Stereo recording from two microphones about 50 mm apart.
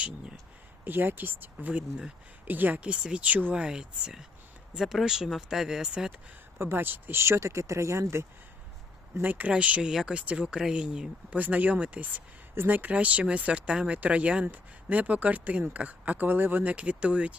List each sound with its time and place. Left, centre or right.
0.9 s speech: right
1.7 s speech: right
2.4 s speech: right
2.8 s speech: centre
3.2 s speech: right
3.5 s speech: centre
6.6 s speech: right
7.2 s speech: right
9.2 s speech: right
9.5 s speech: right
9.8 s speech: centre
10.1 s speech: right
11.3 s speech: right
16.7 s speech: right